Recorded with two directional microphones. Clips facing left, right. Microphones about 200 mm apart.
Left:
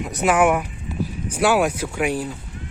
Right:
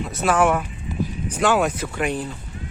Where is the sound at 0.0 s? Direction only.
15° left (ahead or behind).